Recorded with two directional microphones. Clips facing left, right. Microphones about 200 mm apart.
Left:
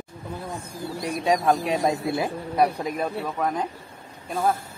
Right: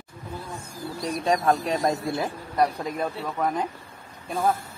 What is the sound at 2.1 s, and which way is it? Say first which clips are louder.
Speech: left 2 dB; 15° left (ahead or behind).